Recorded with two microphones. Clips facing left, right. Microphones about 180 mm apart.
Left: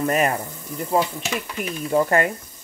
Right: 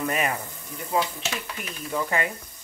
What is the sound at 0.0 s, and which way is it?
Speech, 40° left (ahead or behind).